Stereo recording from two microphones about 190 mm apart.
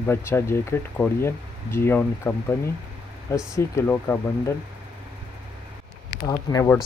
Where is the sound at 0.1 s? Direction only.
15° left (ahead or behind).